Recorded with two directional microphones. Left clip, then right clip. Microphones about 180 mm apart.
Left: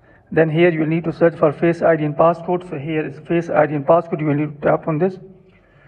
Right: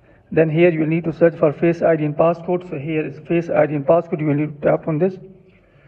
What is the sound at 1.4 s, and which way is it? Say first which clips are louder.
Speech: left 1 dB; 35° left (ahead or behind).